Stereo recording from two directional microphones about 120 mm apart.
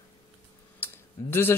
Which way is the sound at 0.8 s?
20° left (ahead or behind).